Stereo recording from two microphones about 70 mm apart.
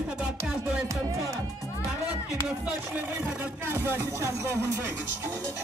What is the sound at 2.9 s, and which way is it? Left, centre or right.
Speech, right.